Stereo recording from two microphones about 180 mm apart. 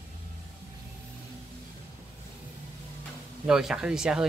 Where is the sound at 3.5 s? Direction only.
5° right (ahead or behind).